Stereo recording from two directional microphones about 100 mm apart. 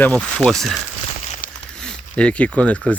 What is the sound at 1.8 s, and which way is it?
Speech, 10° left (ahead or behind).